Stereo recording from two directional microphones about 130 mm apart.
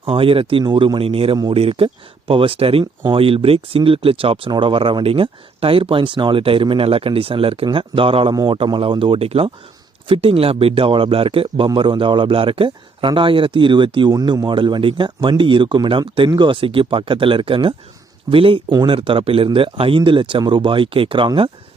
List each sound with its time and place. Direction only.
0.0 s speech: 45° right (ahead or behind)
18.7 s speech: 35° right (ahead or behind)
18.9 s speech: 45° right (ahead or behind)